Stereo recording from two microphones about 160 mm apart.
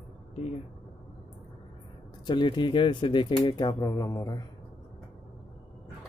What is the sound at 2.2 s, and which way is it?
Speech, 30° left (ahead or behind).